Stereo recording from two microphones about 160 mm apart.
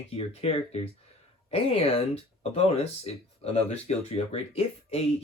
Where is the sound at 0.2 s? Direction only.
40° left (ahead or behind).